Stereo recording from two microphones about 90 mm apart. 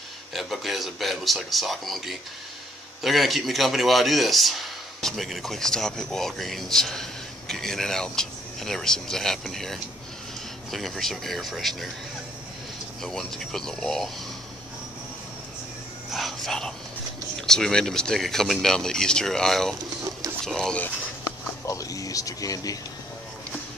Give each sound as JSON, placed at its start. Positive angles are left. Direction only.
{"t": 0.3, "sound": "speech", "side_deg": 0}
{"t": 13.0, "sound": "speech", "side_deg": 5}
{"t": 16.1, "sound": "whispering", "side_deg": 0}
{"t": 17.5, "sound": "speech", "side_deg": 5}
{"t": 21.6, "sound": "speech", "side_deg": 40}